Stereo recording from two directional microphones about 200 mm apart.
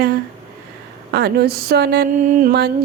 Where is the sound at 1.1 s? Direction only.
55° right (ahead or behind).